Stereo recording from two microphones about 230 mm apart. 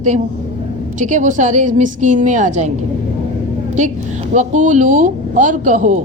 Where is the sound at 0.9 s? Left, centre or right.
Right.